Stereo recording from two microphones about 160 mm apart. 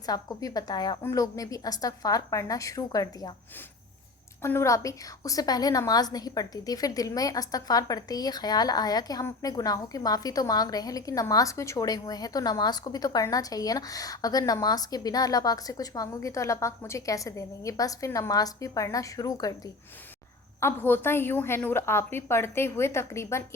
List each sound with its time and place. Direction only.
0.0 s a woman's voice: 20° left (ahead or behind)
4.4 s a woman's voice: 15° left (ahead or behind)